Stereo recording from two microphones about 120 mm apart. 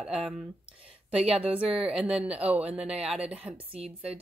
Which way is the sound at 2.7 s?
55° right (ahead or behind).